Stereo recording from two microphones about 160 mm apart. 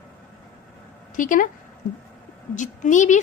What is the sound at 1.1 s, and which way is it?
Speech, 55° left (ahead or behind).